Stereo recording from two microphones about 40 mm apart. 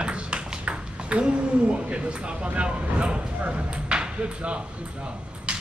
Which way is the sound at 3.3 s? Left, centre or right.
Right.